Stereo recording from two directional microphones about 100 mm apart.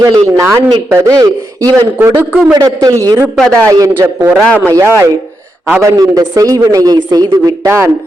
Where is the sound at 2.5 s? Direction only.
35° right (ahead or behind).